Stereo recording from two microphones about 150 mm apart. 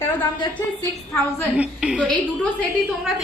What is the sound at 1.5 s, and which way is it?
Speech, 10° right (ahead or behind).